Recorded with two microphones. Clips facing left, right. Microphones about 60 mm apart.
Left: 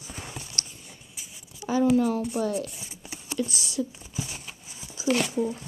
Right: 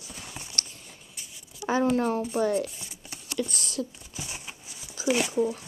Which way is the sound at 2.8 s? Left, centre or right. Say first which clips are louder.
Left 2 dB; left.